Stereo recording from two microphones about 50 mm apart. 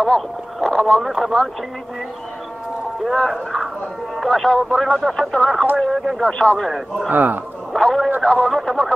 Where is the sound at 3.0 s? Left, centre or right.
Centre.